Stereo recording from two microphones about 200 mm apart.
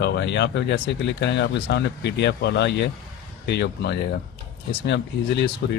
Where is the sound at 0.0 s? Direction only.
60° left (ahead or behind).